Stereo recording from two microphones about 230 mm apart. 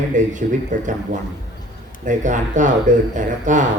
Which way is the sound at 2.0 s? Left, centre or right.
Right.